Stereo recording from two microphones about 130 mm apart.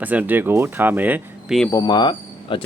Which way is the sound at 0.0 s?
10° right (ahead or behind).